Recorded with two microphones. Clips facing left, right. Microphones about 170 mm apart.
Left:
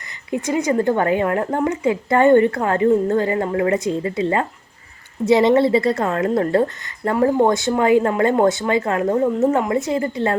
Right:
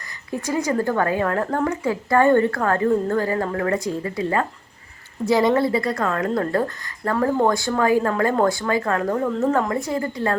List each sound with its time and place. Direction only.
0.3 s a woman's voice: 20° left (ahead or behind)